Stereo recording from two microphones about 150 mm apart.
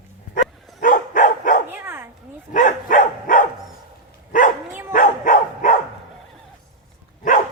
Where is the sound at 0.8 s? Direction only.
60° left (ahead or behind).